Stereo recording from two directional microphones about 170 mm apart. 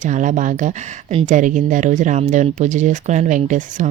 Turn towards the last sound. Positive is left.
turn(degrees=-45)  # may be behind; listen again after turning